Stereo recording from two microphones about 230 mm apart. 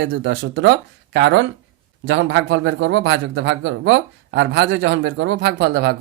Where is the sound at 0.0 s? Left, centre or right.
Right.